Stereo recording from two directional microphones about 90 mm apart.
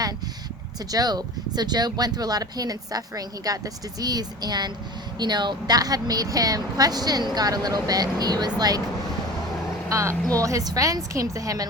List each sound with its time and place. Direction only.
0.9 s speech: 45° right (ahead or behind)
9.9 s a woman's voice: 35° right (ahead or behind)